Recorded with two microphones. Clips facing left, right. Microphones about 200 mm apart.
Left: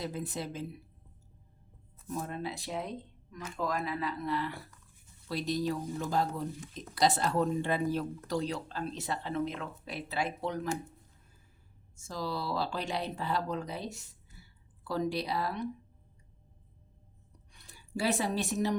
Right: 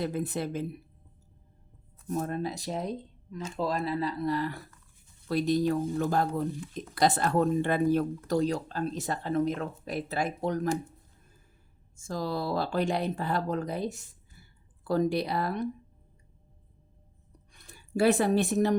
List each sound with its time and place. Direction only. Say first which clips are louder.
0.0 s speech: right 6 dB; 60° right (ahead or behind)
2.0 s speech: right 6 dB; 40° right (ahead or behind)
3.3 s speech: right 4 dB; 30° right (ahead or behind)
5.3 s speech: right 6 dB; 55° right (ahead or behind)
11.9 s speech: right 4 dB; 50° right (ahead or behind)
17.5 s speech: right 5 dB; 50° right (ahead or behind)